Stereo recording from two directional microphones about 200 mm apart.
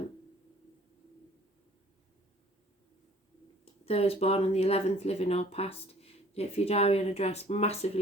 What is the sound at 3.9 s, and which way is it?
Speech, 30° left (ahead or behind).